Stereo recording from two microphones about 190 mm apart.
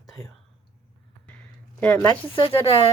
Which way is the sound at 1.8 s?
10° left (ahead or behind).